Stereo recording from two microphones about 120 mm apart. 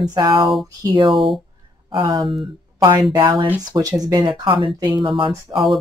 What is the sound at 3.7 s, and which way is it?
Speech, 30° right (ahead or behind).